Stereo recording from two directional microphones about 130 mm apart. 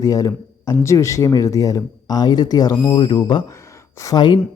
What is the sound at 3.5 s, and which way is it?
Speech, 20° left (ahead or behind).